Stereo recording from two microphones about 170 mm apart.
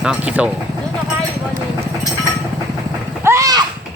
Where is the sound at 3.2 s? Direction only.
15° right (ahead or behind).